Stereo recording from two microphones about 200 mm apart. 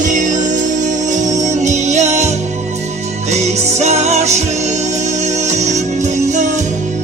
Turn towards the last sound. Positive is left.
turn(degrees=-35)  # may be behind; listen again after turning